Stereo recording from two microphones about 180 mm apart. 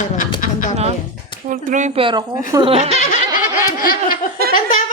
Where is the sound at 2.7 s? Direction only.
35° right (ahead or behind).